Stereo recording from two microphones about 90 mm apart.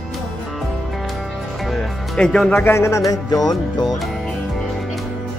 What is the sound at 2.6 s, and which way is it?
Music, 30° left (ahead or behind).